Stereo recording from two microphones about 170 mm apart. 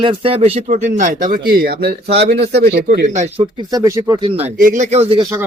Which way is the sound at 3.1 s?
45° right (ahead or behind).